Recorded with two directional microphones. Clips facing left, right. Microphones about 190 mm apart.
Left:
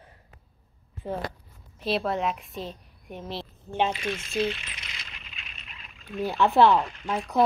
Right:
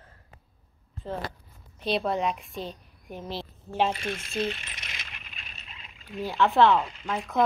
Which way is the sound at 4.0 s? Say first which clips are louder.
Left 2 dB; 40° right (ahead or behind).